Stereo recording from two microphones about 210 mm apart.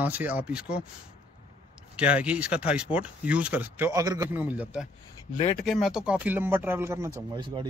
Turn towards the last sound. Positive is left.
turn(degrees=-20)  # may be behind; listen again after turning